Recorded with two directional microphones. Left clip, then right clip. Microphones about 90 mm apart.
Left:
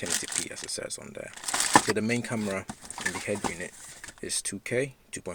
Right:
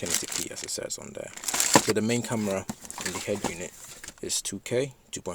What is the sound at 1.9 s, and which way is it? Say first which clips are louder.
Speech: right 2 dB; 30° right (ahead or behind).